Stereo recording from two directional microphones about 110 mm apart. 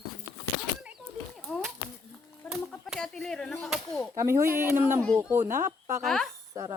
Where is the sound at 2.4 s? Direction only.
5° left (ahead or behind).